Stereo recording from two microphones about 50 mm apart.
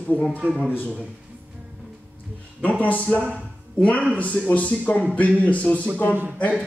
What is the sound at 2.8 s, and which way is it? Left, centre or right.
Speech, left.